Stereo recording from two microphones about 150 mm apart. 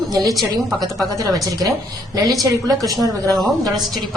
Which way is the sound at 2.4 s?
25° right (ahead or behind).